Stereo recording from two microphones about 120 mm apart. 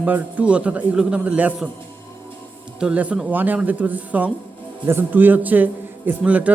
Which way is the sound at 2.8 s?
10° right (ahead or behind).